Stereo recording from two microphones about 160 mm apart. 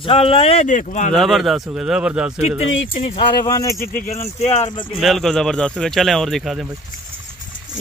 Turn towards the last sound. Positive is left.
turn(degrees=0)  # may be behind; listen again after turning